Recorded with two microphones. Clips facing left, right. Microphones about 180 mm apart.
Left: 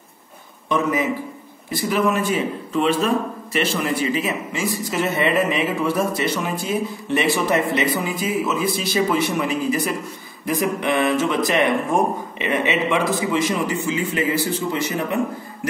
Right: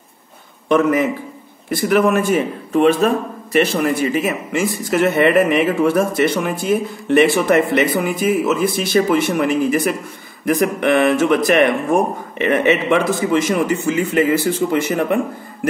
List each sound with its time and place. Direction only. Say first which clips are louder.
0.7 s a man's voice: right 6 dB; 55° right (ahead or behind)